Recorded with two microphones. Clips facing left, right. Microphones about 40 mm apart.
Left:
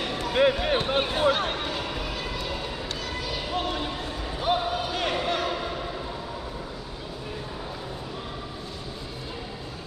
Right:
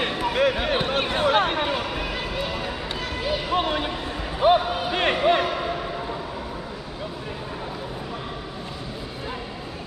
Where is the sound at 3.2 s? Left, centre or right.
Right.